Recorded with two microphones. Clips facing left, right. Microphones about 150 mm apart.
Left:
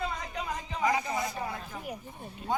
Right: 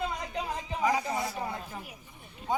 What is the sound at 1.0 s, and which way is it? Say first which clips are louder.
Speech: even; 5° right (ahead or behind).